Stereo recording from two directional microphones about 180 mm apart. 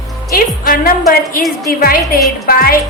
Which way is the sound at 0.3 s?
55° left (ahead or behind).